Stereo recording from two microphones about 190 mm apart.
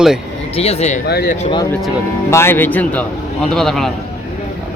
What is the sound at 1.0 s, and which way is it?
Speech, 55° left (ahead or behind).